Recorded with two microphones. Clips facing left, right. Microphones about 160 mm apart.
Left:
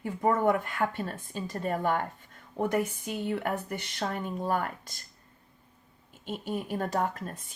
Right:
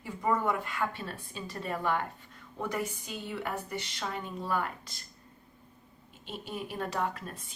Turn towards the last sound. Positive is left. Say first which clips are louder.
# left 2 dB
turn(degrees=50)  # may be behind; listen again after turning